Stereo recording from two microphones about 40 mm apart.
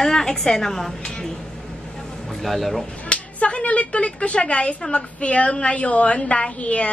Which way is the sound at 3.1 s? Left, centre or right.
Left.